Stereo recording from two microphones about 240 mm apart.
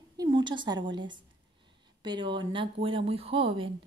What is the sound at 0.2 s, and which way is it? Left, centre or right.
A woman's voice, centre.